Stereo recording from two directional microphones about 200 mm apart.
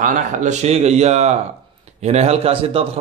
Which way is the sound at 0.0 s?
40° right (ahead or behind).